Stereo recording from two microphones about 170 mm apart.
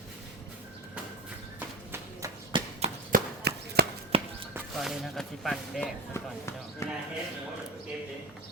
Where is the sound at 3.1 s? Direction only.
65° right (ahead or behind).